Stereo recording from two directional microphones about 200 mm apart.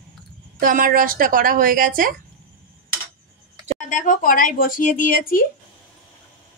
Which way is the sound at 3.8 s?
40° left (ahead or behind).